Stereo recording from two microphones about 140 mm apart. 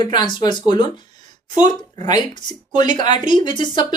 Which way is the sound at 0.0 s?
30° left (ahead or behind).